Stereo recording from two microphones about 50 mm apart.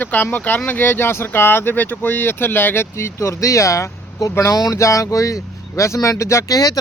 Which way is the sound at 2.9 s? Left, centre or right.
Left.